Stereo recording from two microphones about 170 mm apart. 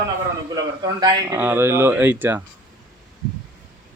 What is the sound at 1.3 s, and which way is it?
Speech, 10° right (ahead or behind).